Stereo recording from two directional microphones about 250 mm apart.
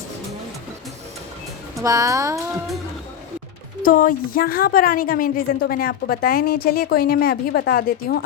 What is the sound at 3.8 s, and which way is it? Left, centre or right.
A woman's voice, left.